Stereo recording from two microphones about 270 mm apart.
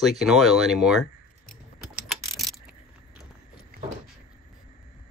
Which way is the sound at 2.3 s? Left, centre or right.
Centre.